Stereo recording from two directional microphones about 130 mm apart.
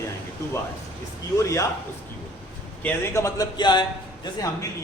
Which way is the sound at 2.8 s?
15° left (ahead or behind).